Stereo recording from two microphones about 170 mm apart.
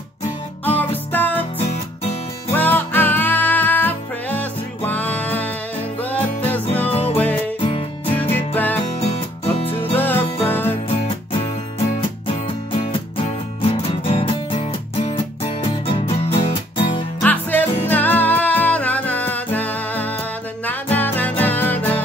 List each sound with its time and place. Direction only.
0.7 s music: 10° left (ahead or behind)
1.7 s music: 40° left (ahead or behind)
2.5 s music: 10° left (ahead or behind)
6.9 s music: 35° left (ahead or behind)
8.2 s music: 10° left (ahead or behind)
9.1 s music: 35° left (ahead or behind)
9.9 s music: 10° left (ahead or behind)
12.3 s music: 30° left (ahead or behind)
17.2 s music: 10° left (ahead or behind)